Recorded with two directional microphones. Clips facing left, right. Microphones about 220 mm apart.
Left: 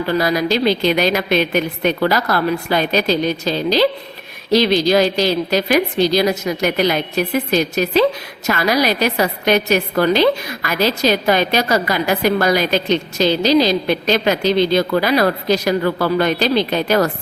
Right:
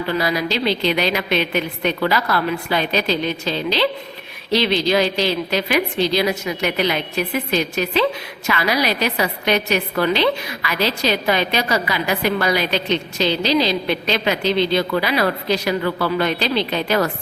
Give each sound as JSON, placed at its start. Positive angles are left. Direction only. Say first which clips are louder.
{"t": 0.1, "sound": "a woman's voice", "louder": "left 5 dB", "side_deg": 45}